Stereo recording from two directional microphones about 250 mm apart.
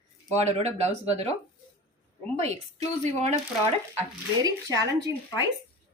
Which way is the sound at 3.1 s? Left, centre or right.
Right.